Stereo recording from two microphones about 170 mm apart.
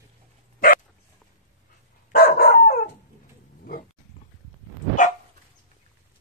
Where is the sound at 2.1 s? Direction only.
65° left (ahead or behind).